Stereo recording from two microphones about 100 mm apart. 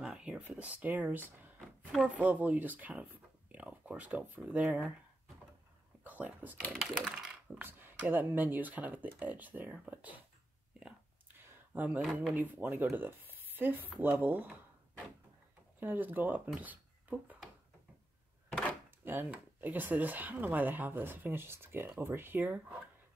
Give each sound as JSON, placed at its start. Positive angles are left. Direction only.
{"t": 0.0, "sound": "a sound", "side_deg": -10}
{"t": 0.6, "sound": "speech", "side_deg": -15}
{"t": 6.0, "sound": "speech", "side_deg": -15}
{"t": 6.7, "sound": "speech", "side_deg": 5}
{"t": 7.1, "sound": "speech", "side_deg": -10}
{"t": 7.6, "sound": "speech", "side_deg": -20}
{"t": 10.8, "sound": "a sound", "side_deg": -15}
{"t": 12.4, "sound": "speech", "side_deg": -15}
{"t": 15.8, "sound": "speech", "side_deg": -20}
{"t": 19.0, "sound": "speech", "side_deg": -15}